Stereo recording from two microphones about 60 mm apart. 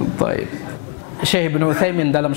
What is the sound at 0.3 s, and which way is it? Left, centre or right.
A man's voice, centre.